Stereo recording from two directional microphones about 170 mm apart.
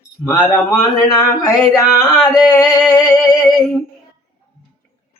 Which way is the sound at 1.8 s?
15° left (ahead or behind).